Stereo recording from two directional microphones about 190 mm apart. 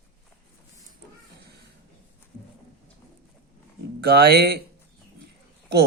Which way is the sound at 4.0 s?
55° right (ahead or behind).